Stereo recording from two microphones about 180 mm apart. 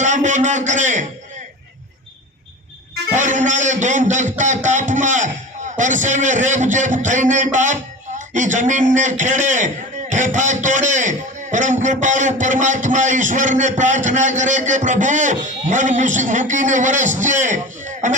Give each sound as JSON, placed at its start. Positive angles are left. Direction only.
{"t": 0.0, "sound": "a man's voice", "side_deg": -45}
{"t": 3.1, "sound": "a man's voice", "side_deg": -45}